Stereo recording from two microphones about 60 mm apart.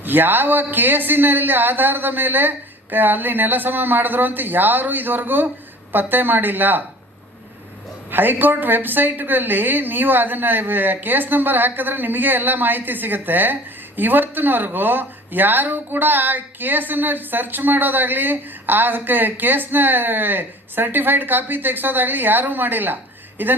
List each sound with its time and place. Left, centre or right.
0.0 s a woman's voice: right
8.1 s a woman's voice: right